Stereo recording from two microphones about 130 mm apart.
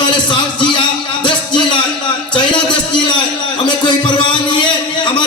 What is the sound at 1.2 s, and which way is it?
Music, 40° left (ahead or behind).